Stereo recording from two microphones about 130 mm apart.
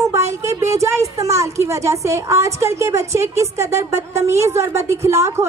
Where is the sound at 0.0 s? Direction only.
20° right (ahead or behind).